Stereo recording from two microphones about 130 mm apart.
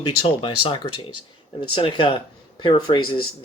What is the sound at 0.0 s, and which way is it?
Speech, 40° left (ahead or behind).